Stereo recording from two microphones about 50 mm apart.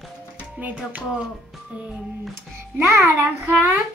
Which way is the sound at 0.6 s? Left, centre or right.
Right.